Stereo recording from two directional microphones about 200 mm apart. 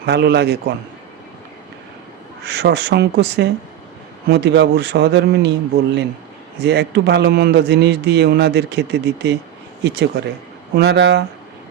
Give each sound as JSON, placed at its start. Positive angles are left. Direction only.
{"t": 0.0, "sound": "a man's voice", "side_deg": -55}
{"t": 2.4, "sound": "a man's voice", "side_deg": -60}